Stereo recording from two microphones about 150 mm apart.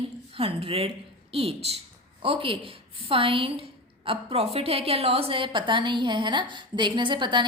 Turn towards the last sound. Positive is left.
turn(degrees=-30)  # may be behind; listen again after turning